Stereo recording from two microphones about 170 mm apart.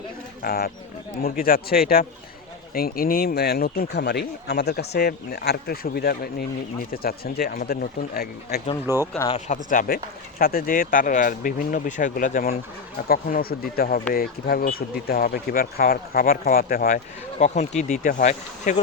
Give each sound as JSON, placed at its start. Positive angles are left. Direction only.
{"t": 0.4, "sound": "speech", "side_deg": 60}
{"t": 8.9, "sound": "speech", "side_deg": -15}
{"t": 9.6, "sound": "speech", "side_deg": 55}
{"t": 17.4, "sound": "speech", "side_deg": 45}